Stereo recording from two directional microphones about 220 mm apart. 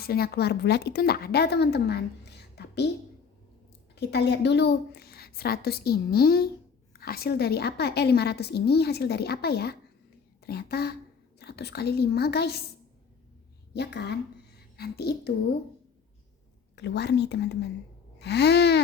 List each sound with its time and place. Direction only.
0.0 s a woman's voice: 45° left (ahead or behind)
3.9 s a woman's voice: 50° left (ahead or behind)
13.7 s a woman's voice: 50° left (ahead or behind)
16.7 s a woman's voice: 50° left (ahead or behind)